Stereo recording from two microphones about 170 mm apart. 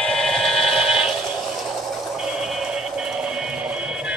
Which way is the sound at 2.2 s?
Centre (ahead or behind).